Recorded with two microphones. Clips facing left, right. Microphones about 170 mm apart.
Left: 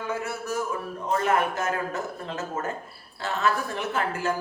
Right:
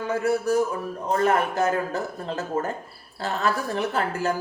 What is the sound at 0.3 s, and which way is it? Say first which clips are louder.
Speech: right 8 dB; 35° right (ahead or behind).